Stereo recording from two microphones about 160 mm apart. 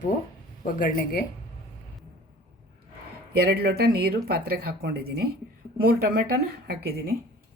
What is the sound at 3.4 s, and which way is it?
Speech, 85° right.